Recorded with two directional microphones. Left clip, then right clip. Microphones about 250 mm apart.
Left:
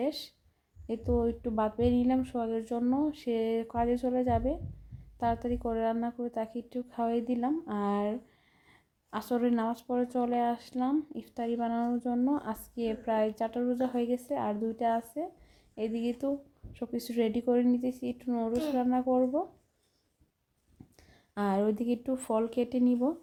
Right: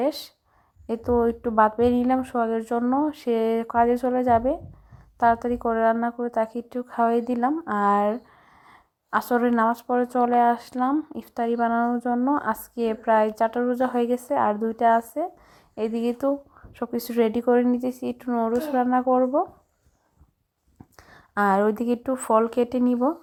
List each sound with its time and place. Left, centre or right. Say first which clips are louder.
0.0 s a woman's voice: right 8 dB; centre
20.9 s speech: right 13 dB; centre